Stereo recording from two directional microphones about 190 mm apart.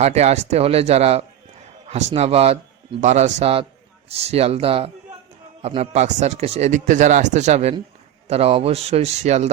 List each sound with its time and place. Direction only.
0.0 s speech: 35° right (ahead or behind)